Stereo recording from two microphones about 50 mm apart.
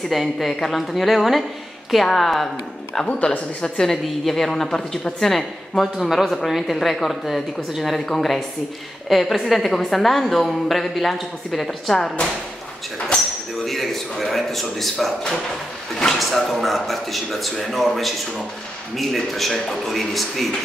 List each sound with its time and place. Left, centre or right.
0.1 s a woman's voice: centre
3.0 s a woman's voice: left
13.7 s a woman's voice: centre